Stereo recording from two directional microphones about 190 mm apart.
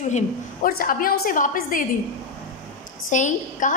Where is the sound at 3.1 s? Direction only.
40° left (ahead or behind).